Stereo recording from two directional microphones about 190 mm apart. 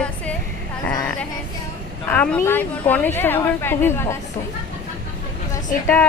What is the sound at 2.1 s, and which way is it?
A woman's voice, 10° left (ahead or behind).